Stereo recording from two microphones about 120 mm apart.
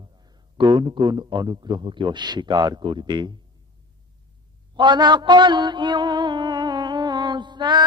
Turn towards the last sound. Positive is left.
turn(degrees=-40)  # may be behind; listen again after turning